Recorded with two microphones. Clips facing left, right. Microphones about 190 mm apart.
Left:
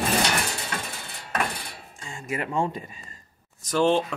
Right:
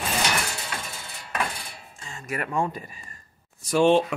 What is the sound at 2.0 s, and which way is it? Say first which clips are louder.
Speech: left 1 dB; 30° left (ahead or behind).